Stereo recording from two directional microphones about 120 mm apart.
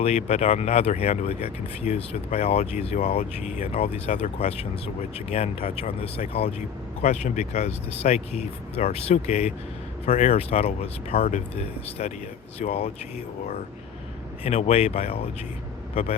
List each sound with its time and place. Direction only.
0.0 s speech: 65° left (ahead or behind)
7.0 s speech: 70° left (ahead or behind)